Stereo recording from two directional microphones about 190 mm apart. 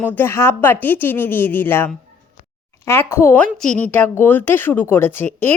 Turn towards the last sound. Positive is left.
turn(degrees=10)  # may be behind; listen again after turning